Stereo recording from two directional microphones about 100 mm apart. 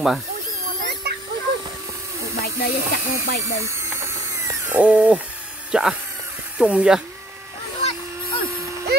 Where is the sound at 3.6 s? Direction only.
25° right (ahead or behind).